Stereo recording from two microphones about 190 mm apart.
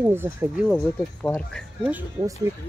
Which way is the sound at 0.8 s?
10° left (ahead or behind).